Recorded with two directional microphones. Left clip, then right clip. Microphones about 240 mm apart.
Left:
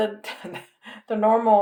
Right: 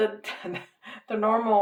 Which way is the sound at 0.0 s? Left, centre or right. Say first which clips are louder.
Left 1 dB; left.